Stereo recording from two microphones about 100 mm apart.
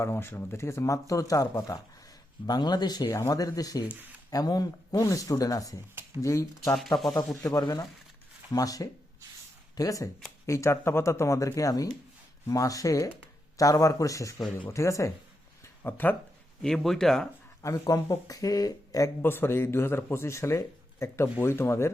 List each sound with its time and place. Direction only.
0.0 s speech: 25° left (ahead or behind)
6.7 s speech: centre (ahead or behind)
7.6 s speech: 40° left (ahead or behind)
15.6 s a sound: 25° left (ahead or behind)
16.6 s speech: 5° left (ahead or behind)
17.6 s speech: 35° left (ahead or behind)
19.2 s speech: 20° left (ahead or behind)